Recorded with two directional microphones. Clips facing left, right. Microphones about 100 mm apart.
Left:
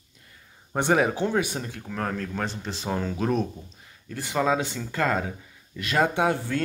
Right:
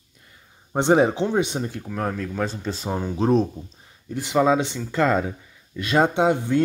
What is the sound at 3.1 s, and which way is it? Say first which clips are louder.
Speech: right 6 dB; 30° right (ahead or behind).